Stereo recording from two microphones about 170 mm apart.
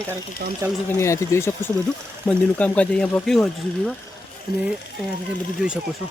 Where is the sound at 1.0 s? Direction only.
15° left (ahead or behind).